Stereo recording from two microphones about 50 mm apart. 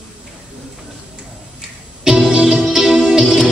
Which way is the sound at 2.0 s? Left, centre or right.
Centre.